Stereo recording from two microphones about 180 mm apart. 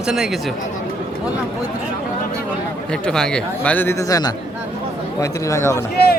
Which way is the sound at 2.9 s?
5° left (ahead or behind).